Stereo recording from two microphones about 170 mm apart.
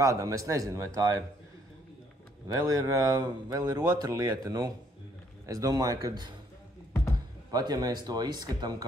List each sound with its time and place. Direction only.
0.0 s speech: 20° right (ahead or behind)
2.4 s speech: 20° right (ahead or behind)
7.5 s speech: 25° right (ahead or behind)